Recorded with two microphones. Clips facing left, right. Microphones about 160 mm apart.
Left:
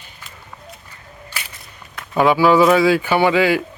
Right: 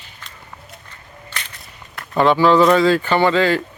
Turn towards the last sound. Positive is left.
turn(degrees=10)  # may be behind; listen again after turning